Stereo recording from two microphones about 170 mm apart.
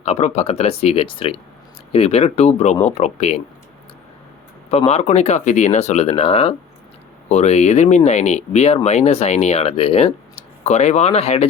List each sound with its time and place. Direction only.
0.0 s speech: 40° left (ahead or behind)
4.9 s speech: 40° left (ahead or behind)